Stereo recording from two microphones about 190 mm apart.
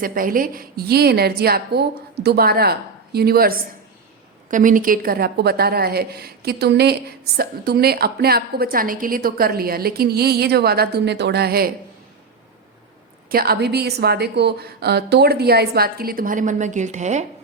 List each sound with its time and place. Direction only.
0.0 s a woman's voice: 45° right (ahead or behind)
13.3 s a woman's voice: 55° right (ahead or behind); by 17.2 s 40° right (ahead or behind)